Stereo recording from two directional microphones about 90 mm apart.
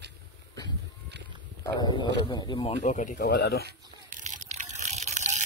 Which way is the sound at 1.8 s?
50° left (ahead or behind).